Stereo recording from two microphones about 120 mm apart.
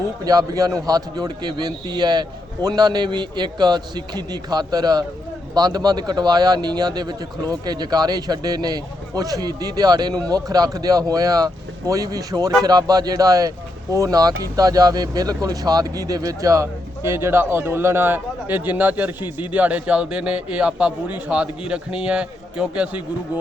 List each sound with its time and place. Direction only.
0.3 s a man's voice: 30° right (ahead or behind); by 23.0 s 10° right (ahead or behind)